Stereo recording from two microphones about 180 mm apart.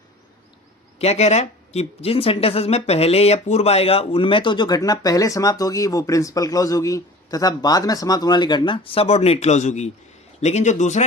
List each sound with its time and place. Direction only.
0.9 s a man's voice: 35° left (ahead or behind)